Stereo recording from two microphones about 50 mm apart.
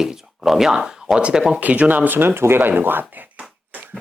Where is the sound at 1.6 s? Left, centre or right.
Right.